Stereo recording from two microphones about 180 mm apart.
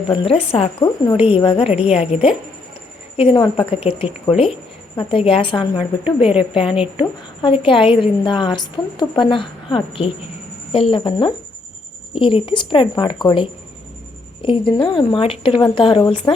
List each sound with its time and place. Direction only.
0.1 s a woman's voice: 30° left (ahead or behind)
14.7 s a woman's voice: 25° left (ahead or behind)